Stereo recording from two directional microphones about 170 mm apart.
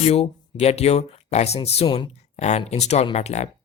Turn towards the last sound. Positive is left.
turn(degrees=40)  # may be behind; listen again after turning